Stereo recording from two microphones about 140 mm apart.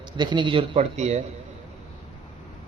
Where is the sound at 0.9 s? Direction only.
55° right (ahead or behind).